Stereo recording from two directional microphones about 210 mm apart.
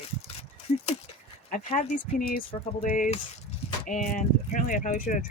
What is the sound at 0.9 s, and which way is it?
Speech, 35° left (ahead or behind).